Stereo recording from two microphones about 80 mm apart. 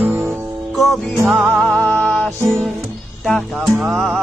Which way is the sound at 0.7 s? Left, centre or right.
Centre.